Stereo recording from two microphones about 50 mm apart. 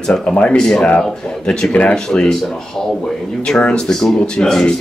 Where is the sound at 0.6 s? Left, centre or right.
Centre.